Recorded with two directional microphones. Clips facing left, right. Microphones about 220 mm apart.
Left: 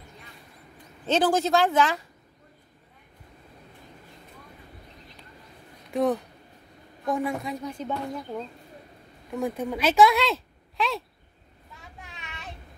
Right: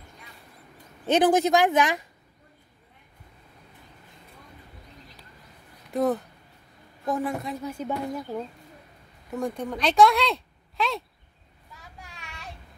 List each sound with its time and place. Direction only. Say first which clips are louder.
1.0 s speech: right 3 dB; 15° right (ahead or behind)
5.9 s a woman's voice: even; centre (ahead or behind)
9.3 s speech: left 1 dB; 5° left (ahead or behind)
12.0 s child singing: left 1 dB; centre (ahead or behind)